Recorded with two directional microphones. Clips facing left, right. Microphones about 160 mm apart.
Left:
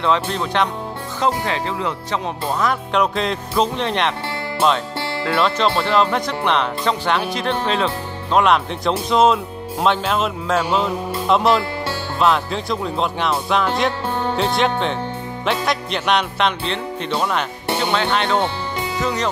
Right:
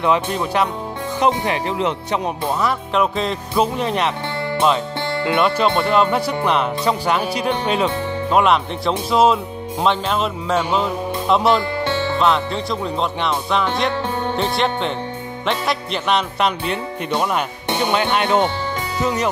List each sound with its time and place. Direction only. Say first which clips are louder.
0.0 s speech: right 1 dB; 10° right (ahead or behind)
2.4 s music: even; centre (ahead or behind)
4.6 s speech: even; centre (ahead or behind)
5.8 s music: right 1 dB; 5° right (ahead or behind)
17.9 s speech: right 3 dB; 10° right (ahead or behind)